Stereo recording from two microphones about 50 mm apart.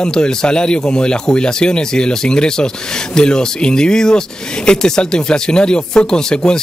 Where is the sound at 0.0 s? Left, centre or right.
Centre.